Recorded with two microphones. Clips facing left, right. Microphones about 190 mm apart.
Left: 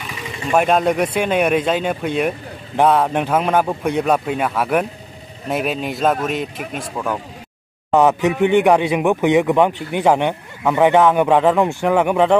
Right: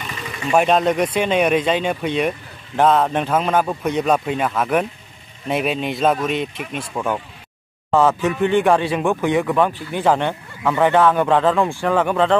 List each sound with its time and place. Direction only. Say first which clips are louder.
0.0 s vehicle: even; 10° left (ahead or behind)
0.5 s speech: even; 5° left (ahead or behind)
7.9 s speech: left 2 dB; 15° left (ahead or behind)